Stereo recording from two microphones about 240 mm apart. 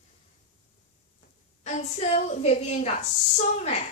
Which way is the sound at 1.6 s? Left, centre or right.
Left.